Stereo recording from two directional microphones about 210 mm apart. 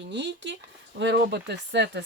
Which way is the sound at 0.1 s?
55° right (ahead or behind).